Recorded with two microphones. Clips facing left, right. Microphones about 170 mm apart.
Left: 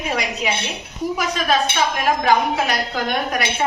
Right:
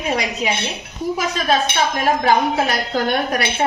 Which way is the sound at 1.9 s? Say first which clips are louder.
Right 1 dB; 30° right (ahead or behind).